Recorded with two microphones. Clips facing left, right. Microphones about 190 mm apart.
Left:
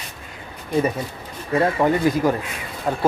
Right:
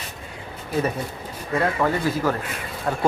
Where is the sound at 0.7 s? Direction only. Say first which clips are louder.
Left 3 dB; 5° right (ahead or behind).